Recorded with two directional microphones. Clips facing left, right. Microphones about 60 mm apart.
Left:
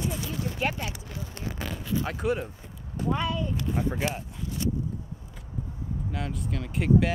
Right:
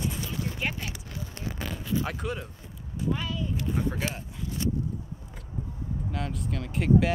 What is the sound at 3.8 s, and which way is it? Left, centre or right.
Speech, centre.